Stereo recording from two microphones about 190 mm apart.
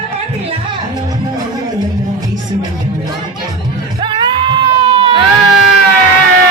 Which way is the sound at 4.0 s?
25° right (ahead or behind).